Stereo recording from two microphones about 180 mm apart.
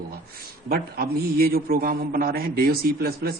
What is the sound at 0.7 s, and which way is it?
Speech, 55° right (ahead or behind).